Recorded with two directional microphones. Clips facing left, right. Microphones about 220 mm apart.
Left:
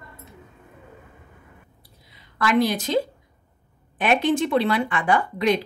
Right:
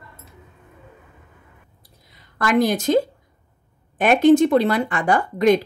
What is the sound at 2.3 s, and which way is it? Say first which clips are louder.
Speech: right 2 dB; 45° right (ahead or behind).